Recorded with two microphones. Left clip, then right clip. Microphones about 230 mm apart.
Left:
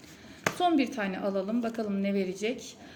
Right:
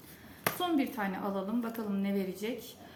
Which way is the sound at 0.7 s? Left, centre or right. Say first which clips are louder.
Left 4 dB; centre.